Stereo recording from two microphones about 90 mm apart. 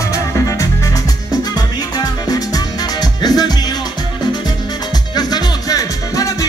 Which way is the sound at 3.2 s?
45° left (ahead or behind).